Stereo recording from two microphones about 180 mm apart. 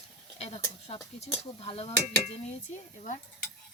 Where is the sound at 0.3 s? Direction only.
35° left (ahead or behind).